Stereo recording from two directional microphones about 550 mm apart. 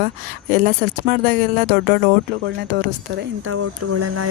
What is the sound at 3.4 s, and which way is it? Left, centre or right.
Speech, right.